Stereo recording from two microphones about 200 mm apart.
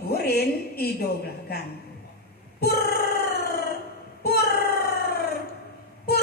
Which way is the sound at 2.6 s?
50° left (ahead or behind).